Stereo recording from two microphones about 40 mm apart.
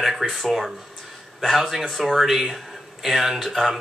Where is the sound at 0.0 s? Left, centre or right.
Centre.